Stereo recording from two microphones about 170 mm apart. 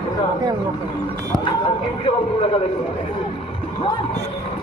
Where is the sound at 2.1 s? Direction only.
35° left (ahead or behind).